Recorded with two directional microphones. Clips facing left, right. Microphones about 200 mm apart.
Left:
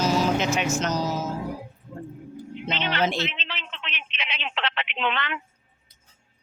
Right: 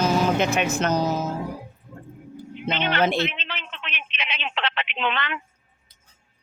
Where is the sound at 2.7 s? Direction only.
55° right (ahead or behind).